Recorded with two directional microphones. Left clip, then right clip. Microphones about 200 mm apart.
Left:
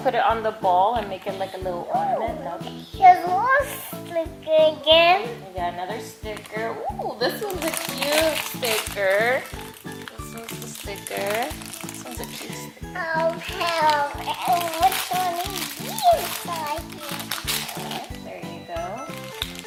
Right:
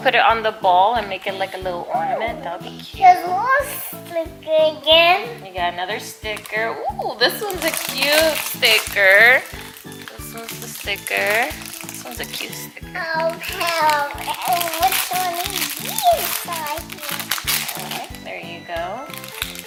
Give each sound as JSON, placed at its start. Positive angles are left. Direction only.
{"t": 0.0, "sound": "a child's voice", "side_deg": 10}
{"t": 10.8, "sound": "a child's voice", "side_deg": 15}
{"t": 12.9, "sound": "a child's voice", "side_deg": 10}